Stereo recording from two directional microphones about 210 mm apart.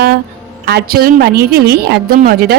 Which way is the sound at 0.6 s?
50° right (ahead or behind).